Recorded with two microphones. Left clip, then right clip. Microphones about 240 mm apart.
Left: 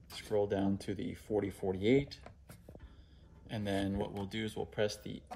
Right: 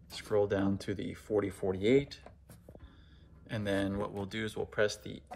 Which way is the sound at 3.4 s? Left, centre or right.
Right.